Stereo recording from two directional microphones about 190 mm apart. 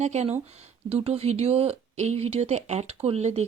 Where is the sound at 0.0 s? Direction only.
35° right (ahead or behind).